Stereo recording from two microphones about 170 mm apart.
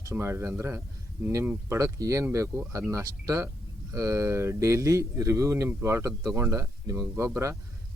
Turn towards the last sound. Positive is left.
turn(degrees=-15)  # may be behind; listen again after turning